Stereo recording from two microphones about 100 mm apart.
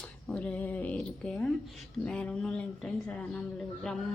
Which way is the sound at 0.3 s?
10° left (ahead or behind).